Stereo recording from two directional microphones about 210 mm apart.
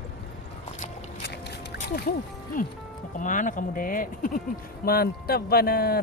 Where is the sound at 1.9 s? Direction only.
45° left (ahead or behind).